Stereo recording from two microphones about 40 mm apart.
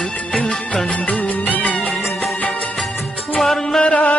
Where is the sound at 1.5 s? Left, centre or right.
Left.